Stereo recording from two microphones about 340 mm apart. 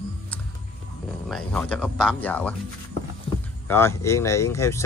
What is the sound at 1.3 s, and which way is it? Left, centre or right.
Speech, centre.